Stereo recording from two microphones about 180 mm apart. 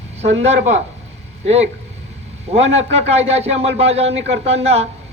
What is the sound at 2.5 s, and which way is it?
A man's voice, 35° right (ahead or behind).